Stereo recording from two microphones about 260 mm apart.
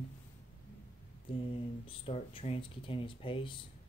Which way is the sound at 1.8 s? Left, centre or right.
Left.